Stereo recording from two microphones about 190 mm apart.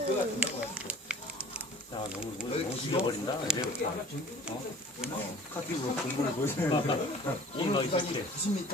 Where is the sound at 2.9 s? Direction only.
25° left (ahead or behind).